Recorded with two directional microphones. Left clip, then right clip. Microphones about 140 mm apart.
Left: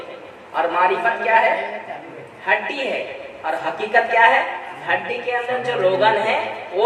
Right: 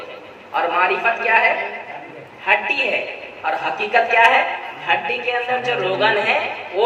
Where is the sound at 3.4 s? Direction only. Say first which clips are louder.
Right 2 dB; 15° right (ahead or behind).